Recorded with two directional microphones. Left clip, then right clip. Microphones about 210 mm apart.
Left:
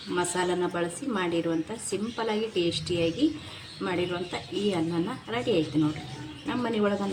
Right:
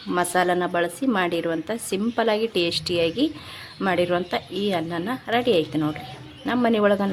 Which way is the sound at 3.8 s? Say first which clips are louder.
Right 8 dB; 55° right (ahead or behind).